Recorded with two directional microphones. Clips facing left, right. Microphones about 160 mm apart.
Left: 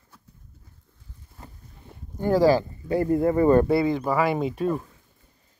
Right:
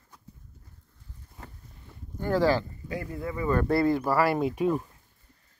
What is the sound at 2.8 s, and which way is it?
Speech, 35° left (ahead or behind).